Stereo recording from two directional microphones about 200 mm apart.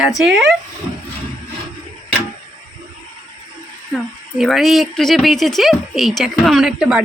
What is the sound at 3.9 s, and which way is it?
Speech, centre (ahead or behind).